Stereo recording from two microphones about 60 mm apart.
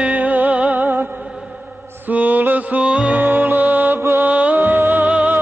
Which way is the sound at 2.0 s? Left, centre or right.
Right.